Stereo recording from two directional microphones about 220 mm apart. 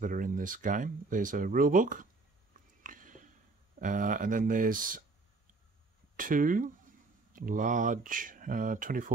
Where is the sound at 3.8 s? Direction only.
35° right (ahead or behind).